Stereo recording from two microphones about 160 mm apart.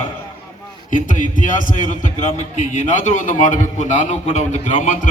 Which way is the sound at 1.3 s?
55° left (ahead or behind).